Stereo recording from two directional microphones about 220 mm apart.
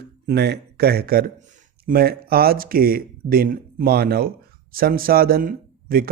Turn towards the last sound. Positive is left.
turn(degrees=-40)  # may be behind; listen again after turning